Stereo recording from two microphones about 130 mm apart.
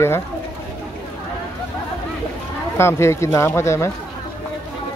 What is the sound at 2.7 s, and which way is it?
Speech, 20° left (ahead or behind).